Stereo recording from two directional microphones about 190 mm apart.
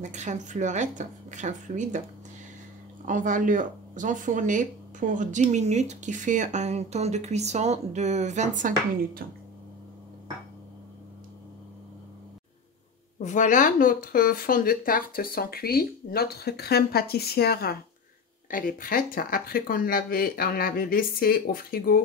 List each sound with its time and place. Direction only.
0.0 s speech: 40° right (ahead or behind)
3.1 s speech: 40° right (ahead or behind)
13.2 s speech: 40° left (ahead or behind)